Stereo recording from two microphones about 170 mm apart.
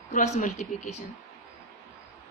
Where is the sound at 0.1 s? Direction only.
45° left (ahead or behind).